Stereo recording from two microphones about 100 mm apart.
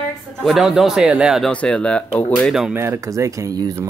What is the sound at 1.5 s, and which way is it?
Speech, 10° left (ahead or behind).